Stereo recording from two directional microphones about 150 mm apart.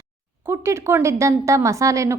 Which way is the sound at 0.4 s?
15° right (ahead or behind).